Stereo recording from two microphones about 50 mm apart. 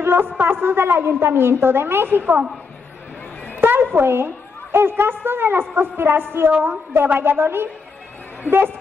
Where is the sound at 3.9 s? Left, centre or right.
Right.